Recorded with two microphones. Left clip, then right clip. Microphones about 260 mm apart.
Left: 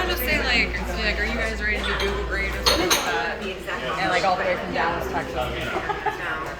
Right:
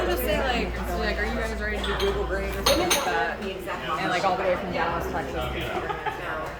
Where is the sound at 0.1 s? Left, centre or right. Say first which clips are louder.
Left 3 dB; right.